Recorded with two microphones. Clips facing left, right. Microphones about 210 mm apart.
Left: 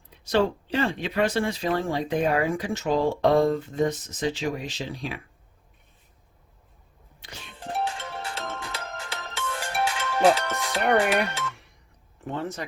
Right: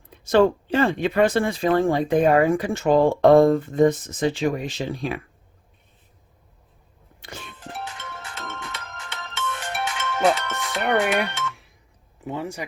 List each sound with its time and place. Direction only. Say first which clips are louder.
0.1 s speech: right 6 dB; 50° right (ahead or behind)
7.2 s music: right 6 dB; 50° right (ahead or behind)
7.9 s music: left 5 dB; 30° left (ahead or behind)
10.8 s speech: even; centre (ahead or behind)